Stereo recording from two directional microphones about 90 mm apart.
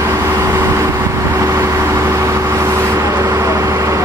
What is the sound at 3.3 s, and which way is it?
Vehicle, 35° right (ahead or behind).